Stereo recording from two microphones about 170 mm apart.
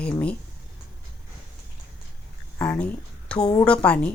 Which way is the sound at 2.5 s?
10° left (ahead or behind).